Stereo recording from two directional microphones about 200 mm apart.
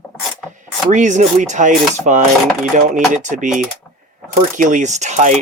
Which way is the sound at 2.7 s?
40° right (ahead or behind).